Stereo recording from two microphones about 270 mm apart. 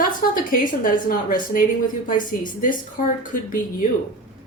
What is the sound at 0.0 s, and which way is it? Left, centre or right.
A woman's voice, left.